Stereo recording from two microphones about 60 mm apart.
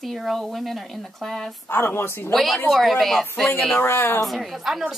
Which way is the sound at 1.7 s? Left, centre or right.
Left.